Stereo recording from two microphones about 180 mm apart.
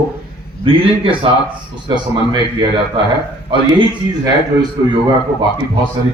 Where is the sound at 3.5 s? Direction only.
25° right (ahead or behind).